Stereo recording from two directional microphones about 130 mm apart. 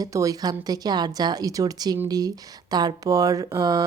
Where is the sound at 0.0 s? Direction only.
25° right (ahead or behind).